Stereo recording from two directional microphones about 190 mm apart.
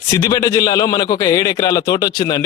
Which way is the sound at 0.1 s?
15° left (ahead or behind).